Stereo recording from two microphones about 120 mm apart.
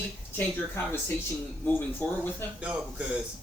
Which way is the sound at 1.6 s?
15° left (ahead or behind).